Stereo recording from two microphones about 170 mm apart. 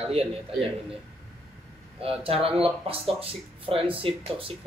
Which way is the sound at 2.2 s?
35° right (ahead or behind).